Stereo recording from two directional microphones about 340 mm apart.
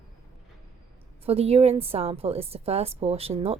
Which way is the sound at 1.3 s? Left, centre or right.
Centre.